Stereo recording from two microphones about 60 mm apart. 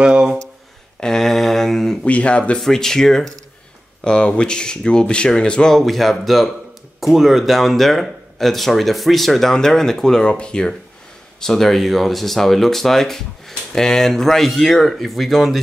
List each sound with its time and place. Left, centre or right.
0.0 s speech: centre
1.0 s a sound: centre
2.0 s speech: left
2.6 s speech: centre